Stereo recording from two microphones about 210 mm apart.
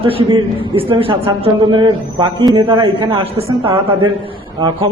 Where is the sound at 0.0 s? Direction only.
25° right (ahead or behind).